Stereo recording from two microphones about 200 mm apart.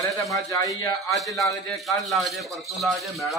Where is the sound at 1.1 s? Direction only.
Centre (ahead or behind).